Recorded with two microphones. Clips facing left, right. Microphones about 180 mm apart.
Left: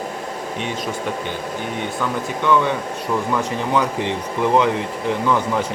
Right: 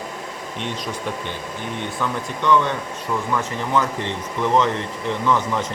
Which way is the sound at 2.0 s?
10° left (ahead or behind).